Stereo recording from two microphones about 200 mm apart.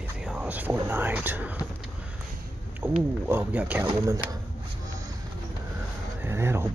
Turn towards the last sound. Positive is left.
turn(degrees=-10)  # may be behind; listen again after turning